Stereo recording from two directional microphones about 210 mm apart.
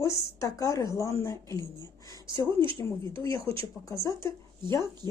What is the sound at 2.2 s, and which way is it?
A woman's voice, 20° right (ahead or behind).